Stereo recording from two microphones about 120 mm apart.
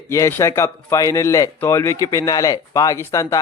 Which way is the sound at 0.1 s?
25° left (ahead or behind).